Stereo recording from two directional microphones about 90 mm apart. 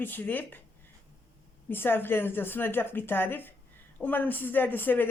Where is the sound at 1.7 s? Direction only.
25° left (ahead or behind).